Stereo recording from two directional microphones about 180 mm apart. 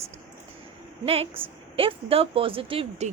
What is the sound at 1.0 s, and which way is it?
A woman's voice, 35° right (ahead or behind).